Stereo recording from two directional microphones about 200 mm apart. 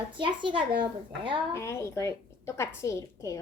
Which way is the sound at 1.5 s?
15° left (ahead or behind).